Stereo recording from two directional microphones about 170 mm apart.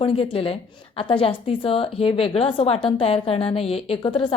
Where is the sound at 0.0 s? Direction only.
35° left (ahead or behind).